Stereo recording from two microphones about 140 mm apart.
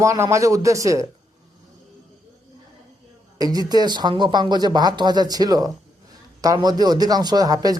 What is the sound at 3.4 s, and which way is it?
Speech, 30° right (ahead or behind).